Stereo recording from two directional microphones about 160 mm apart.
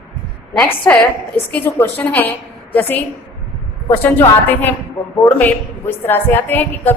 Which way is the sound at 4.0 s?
10° left (ahead or behind).